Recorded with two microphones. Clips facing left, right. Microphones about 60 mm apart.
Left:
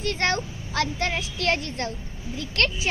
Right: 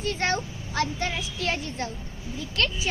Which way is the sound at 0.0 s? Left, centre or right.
Left.